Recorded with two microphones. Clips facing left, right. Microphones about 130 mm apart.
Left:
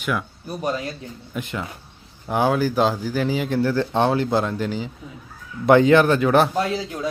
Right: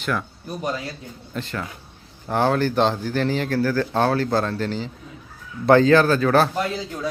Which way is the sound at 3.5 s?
20° left (ahead or behind).